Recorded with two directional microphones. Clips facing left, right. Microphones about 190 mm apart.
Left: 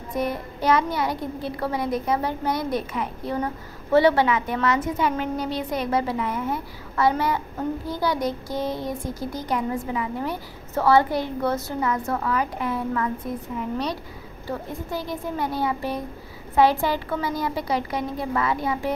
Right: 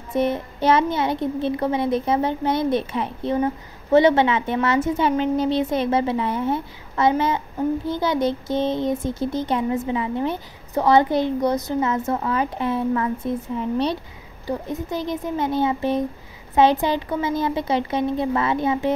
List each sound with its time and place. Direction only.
0.1 s speech: 25° right (ahead or behind)